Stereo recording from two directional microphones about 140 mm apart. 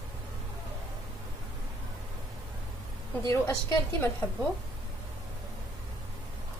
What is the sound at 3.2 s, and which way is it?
Speech, 20° left (ahead or behind).